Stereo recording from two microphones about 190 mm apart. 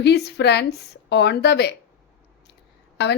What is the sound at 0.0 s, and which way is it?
A woman's voice, 60° left (ahead or behind).